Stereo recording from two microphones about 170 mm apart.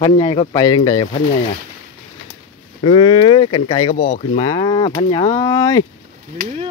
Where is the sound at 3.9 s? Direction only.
55° left (ahead or behind).